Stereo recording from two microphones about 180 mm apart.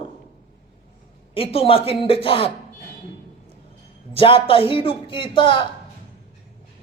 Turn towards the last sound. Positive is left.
turn(degrees=25)  # may be behind; listen again after turning